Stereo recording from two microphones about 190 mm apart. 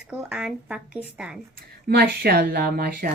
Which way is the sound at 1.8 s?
55° right (ahead or behind).